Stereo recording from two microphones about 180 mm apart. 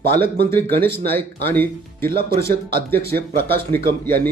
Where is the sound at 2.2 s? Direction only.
60° right (ahead or behind).